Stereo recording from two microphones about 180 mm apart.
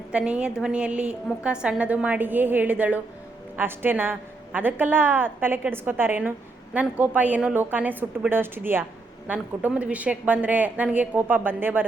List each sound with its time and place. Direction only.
0.1 s a woman's voice: 5° right (ahead or behind)